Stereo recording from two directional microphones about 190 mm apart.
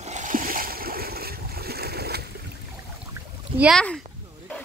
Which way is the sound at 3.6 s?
Centre (ahead or behind).